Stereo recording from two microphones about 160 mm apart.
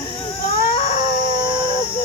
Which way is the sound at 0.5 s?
55° left (ahead or behind).